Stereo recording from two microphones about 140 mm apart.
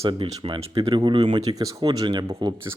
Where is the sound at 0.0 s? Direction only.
40° right (ahead or behind).